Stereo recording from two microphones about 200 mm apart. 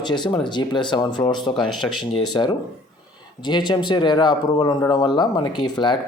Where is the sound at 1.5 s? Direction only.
Centre (ahead or behind).